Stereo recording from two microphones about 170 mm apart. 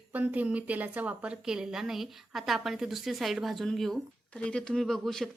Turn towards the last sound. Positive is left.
turn(degrees=0)  # may be behind; listen again after turning